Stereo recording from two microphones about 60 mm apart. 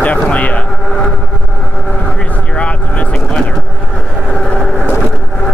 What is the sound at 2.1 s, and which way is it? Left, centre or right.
Vehicle, centre.